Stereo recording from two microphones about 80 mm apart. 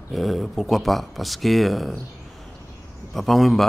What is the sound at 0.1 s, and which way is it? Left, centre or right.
A man's voice, centre.